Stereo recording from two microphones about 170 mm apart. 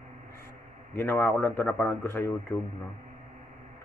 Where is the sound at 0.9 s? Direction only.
15° left (ahead or behind).